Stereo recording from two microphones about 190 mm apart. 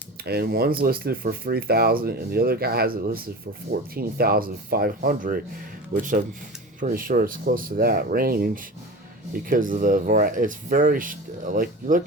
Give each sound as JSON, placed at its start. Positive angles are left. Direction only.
{"t": 0.3, "sound": "speech", "side_deg": -55}